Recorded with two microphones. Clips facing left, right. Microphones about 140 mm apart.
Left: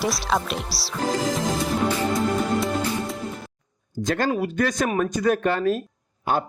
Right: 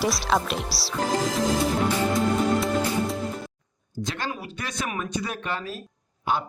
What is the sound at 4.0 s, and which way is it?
A man's voice, 45° left (ahead or behind).